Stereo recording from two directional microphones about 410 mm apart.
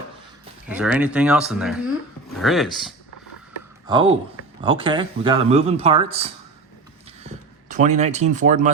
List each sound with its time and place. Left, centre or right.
0.7 s speech: centre
3.8 s speech: centre
7.3 s speech: centre